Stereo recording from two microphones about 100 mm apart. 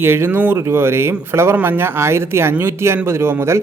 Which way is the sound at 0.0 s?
25° right (ahead or behind).